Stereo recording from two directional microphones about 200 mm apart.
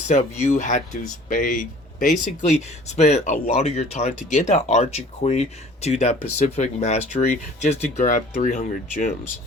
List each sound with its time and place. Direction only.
0.1 s speech: 35° left (ahead or behind)